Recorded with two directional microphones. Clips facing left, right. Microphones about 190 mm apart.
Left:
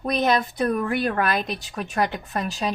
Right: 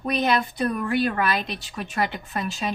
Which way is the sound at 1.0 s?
50° left (ahead or behind).